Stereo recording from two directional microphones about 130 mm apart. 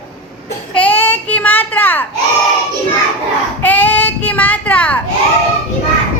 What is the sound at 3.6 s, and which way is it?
Child singing, 15° left (ahead or behind).